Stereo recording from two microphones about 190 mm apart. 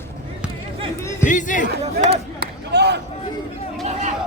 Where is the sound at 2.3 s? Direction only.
60° right (ahead or behind).